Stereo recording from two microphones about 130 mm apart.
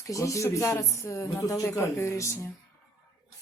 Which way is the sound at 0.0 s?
25° left (ahead or behind).